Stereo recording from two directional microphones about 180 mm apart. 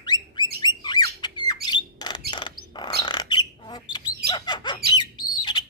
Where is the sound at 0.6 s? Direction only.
25° left (ahead or behind).